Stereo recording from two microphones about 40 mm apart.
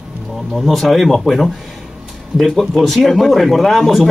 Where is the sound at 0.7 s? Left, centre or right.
Centre.